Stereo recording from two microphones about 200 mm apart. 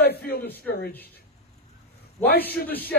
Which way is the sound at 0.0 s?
50° left (ahead or behind).